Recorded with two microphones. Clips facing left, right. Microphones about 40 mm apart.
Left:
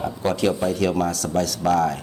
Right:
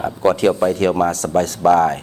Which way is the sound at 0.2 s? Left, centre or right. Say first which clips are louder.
Right 7 dB; right.